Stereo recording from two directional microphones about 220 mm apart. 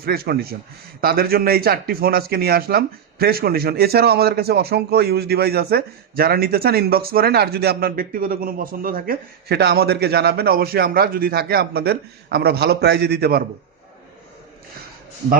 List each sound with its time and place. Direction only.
0.0 s speech: 45° right (ahead or behind)